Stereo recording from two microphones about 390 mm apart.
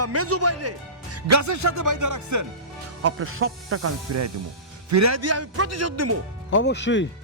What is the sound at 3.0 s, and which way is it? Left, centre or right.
Speech, right.